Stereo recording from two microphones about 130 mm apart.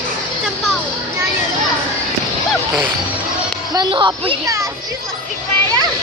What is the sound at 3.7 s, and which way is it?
Speech, 40° right (ahead or behind).